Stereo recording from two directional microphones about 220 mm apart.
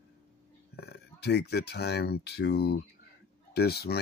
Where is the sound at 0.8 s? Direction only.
45° left (ahead or behind).